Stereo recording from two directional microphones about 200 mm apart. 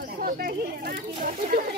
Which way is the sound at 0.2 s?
45° right (ahead or behind).